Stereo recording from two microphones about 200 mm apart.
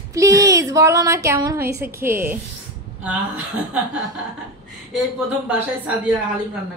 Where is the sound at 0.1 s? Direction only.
15° right (ahead or behind).